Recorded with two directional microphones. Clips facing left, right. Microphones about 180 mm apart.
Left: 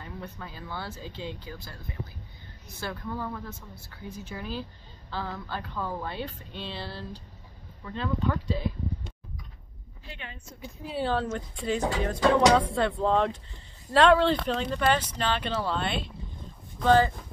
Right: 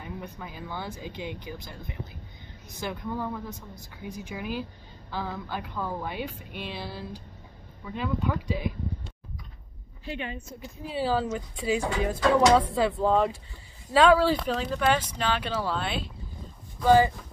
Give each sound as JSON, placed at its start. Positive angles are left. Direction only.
{"t": 0.0, "sound": "speech", "side_deg": -15}
{"t": 10.0, "sound": "speech", "side_deg": -15}